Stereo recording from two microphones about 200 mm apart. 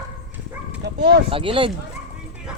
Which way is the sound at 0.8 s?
55° right (ahead or behind).